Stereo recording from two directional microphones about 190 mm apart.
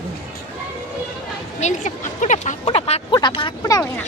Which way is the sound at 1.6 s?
40° left (ahead or behind).